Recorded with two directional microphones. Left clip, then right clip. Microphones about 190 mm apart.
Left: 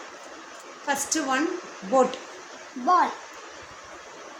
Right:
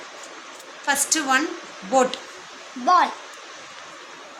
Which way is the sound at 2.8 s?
Centre (ahead or behind).